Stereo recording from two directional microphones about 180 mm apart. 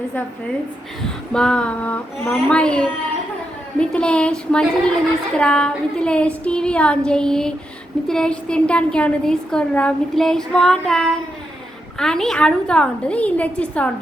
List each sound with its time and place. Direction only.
1.3 s a woman's voice: 5° left (ahead or behind)